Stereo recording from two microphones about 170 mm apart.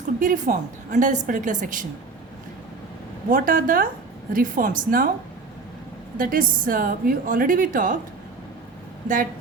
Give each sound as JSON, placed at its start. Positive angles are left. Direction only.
{"t": 0.2, "sound": "a woman's voice", "side_deg": -50}
{"t": 3.2, "sound": "a woman's voice", "side_deg": -55}
{"t": 6.1, "sound": "a woman's voice", "side_deg": -55}